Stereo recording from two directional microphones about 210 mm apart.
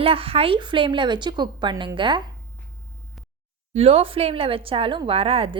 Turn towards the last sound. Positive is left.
turn(degrees=-30)  # may be behind; listen again after turning